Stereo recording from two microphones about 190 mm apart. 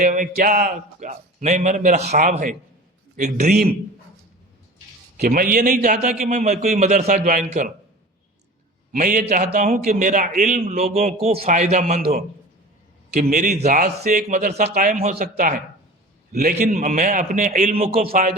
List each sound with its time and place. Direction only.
0.0 s a man's voice: 40° right (ahead or behind)
5.2 s a man's voice: 50° right (ahead or behind)
8.9 s a man's voice: 45° right (ahead or behind)
14.5 s a man's voice: 50° right (ahead or behind)